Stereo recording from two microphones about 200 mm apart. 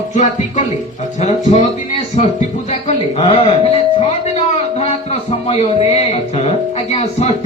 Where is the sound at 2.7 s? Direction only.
30° left (ahead or behind).